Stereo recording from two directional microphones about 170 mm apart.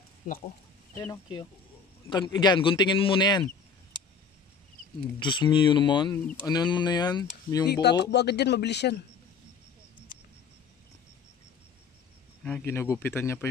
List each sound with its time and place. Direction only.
0.2 s speech: 55° left (ahead or behind)
0.9 s a man's voice: 20° left (ahead or behind)
5.2 s a man's voice: 30° left (ahead or behind)
7.6 s speech: 75° left (ahead or behind)
12.4 s speech: 10° left (ahead or behind)